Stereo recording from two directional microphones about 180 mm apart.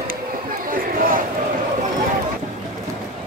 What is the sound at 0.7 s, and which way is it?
Crowd, 50° right (ahead or behind).